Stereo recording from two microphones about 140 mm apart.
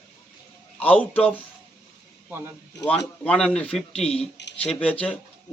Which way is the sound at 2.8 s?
5° left (ahead or behind).